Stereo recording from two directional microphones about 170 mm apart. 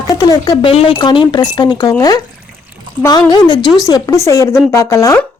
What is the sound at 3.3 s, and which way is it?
A woman's voice, 25° left (ahead or behind).